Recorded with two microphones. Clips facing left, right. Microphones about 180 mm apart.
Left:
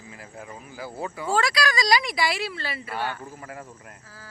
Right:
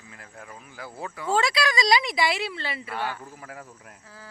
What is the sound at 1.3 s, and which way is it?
Speech, 25° right (ahead or behind).